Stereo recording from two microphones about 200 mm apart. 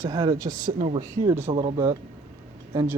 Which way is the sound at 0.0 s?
20° right (ahead or behind).